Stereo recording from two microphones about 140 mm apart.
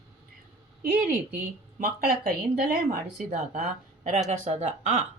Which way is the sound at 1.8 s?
90° right.